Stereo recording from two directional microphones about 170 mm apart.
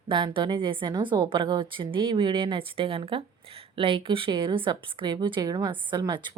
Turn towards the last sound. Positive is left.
turn(degrees=-25)  # may be behind; listen again after turning